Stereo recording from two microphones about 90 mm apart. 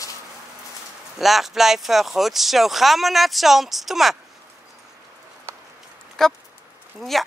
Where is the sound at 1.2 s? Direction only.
Centre (ahead or behind).